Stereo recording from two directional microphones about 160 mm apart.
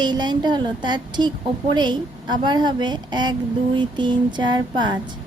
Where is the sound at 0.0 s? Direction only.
25° right (ahead or behind).